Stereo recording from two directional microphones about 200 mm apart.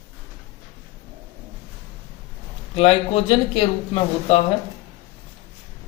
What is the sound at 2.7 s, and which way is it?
Speech, 30° left (ahead or behind).